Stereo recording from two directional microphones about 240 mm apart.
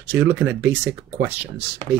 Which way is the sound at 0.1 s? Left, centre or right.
Centre.